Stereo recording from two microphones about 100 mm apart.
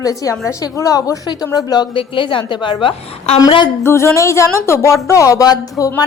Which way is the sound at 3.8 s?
25° left (ahead or behind).